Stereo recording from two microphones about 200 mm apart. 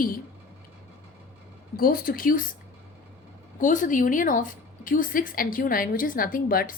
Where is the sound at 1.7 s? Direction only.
45° left (ahead or behind).